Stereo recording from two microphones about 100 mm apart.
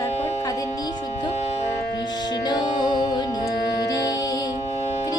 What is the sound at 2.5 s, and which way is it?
Music, 45° left (ahead or behind).